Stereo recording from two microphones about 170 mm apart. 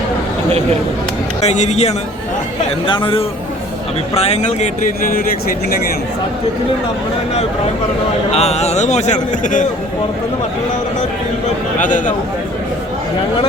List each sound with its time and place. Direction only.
1.4 s speech: 40° left (ahead or behind); by 5.5 s 60° left (ahead or behind)
8.3 s speech: 40° left (ahead or behind)
11.8 s speech: 50° left (ahead or behind)